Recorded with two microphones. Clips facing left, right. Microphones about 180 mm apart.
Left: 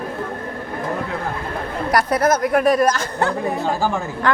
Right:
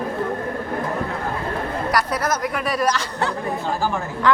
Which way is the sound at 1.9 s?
50° left (ahead or behind).